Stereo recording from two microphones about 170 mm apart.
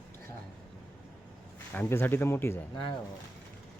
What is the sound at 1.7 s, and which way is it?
Speech, 10° left (ahead or behind).